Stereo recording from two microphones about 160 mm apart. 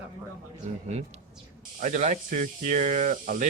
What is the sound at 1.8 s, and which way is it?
Speech, 50° right (ahead or behind).